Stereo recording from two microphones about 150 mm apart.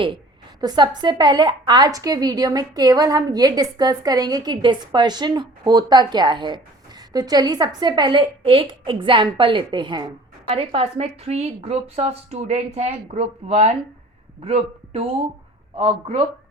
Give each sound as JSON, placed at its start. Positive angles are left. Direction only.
{"t": 0.6, "sound": "a woman's voice", "side_deg": -30}